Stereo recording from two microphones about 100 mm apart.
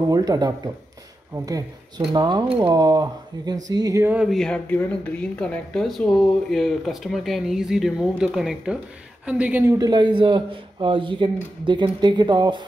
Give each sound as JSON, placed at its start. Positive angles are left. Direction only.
{"t": 0.1, "sound": "speech", "side_deg": -40}
{"t": 2.0, "sound": "a man's voice", "side_deg": -45}
{"t": 4.0, "sound": "speech", "side_deg": -15}
{"t": 4.3, "sound": "speech", "side_deg": 5}
{"t": 9.7, "sound": "a man's voice", "side_deg": -40}